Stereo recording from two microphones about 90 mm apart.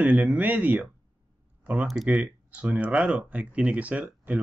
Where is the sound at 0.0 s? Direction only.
15° right (ahead or behind).